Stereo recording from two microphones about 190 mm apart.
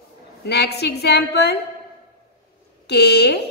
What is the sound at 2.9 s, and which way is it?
Speech, 60° left (ahead or behind).